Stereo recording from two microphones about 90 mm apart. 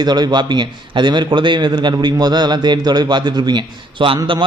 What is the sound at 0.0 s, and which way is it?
A man's voice, 50° right (ahead or behind).